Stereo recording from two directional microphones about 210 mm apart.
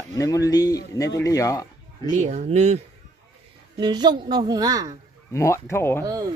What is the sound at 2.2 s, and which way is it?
Speech, 35° right (ahead or behind).